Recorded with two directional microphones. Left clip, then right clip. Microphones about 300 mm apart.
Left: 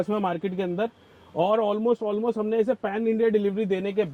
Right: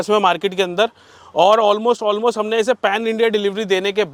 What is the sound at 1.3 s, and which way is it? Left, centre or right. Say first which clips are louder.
Speech: right 10 dB; right.